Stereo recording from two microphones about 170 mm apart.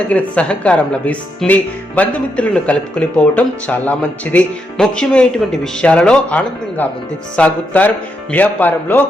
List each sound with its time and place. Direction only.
0.1 s speech: 10° left (ahead or behind)